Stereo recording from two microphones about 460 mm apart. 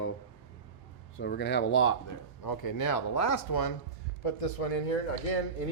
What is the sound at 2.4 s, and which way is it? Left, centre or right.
Speech, left.